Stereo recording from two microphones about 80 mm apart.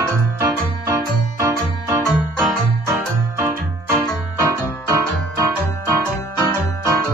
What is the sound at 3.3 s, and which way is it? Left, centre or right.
Music, right.